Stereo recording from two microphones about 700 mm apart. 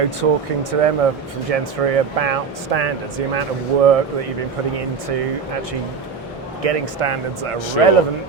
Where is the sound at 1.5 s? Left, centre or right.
Right.